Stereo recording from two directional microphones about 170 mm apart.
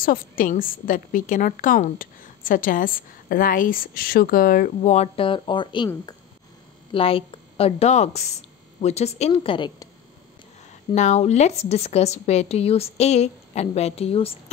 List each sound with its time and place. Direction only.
0.0 s a woman's voice: 55° left (ahead or behind); by 5.9 s 30° left (ahead or behind)
6.9 s speech: 35° left (ahead or behind)
11.0 s speech: 40° left (ahead or behind)